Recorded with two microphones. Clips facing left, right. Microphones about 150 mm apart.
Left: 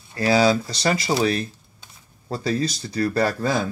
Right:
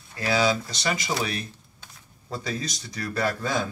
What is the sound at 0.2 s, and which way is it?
Speech, 35° left (ahead or behind).